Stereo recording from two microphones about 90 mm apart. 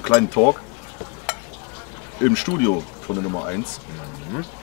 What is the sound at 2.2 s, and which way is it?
Speech, 15° left (ahead or behind).